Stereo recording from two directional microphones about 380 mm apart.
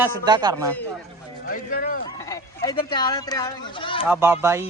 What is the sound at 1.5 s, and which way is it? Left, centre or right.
Speech, left.